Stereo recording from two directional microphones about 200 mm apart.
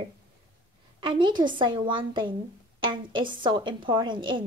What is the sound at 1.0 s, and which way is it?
Speech, 25° right (ahead or behind).